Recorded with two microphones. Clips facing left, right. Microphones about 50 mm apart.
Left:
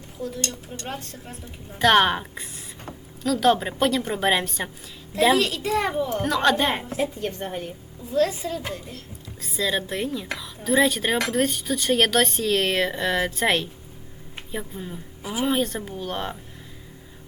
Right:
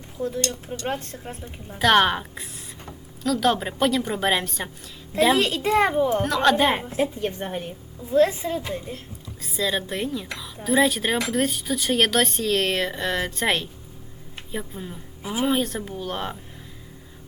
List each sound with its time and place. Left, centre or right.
0.2 s speech: right
1.8 s speech: centre
5.4 s speech: right
6.2 s speech: centre
7.0 s a woman's voice: centre
8.1 s a child's voice: right
9.4 s speech: centre
15.2 s a woman's voice: right
15.4 s speech: centre